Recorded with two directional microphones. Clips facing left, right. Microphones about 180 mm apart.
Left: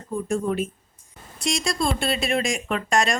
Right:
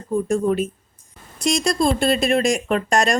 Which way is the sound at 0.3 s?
40° right (ahead or behind).